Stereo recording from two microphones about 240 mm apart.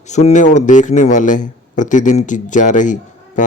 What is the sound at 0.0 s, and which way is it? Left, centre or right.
Speech, left.